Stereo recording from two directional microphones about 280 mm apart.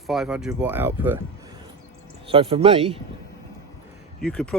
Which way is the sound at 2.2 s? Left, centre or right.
Centre.